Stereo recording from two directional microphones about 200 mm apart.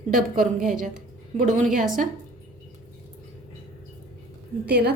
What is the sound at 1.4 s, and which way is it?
Speech, 40° right (ahead or behind).